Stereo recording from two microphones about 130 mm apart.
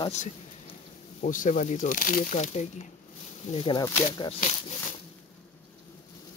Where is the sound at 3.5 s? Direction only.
45° left (ahead or behind).